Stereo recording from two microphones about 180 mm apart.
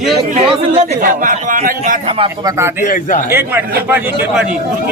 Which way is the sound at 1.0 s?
50° right (ahead or behind).